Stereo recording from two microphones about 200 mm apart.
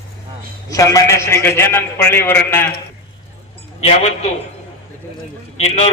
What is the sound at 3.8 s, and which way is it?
Speech, 30° left (ahead or behind).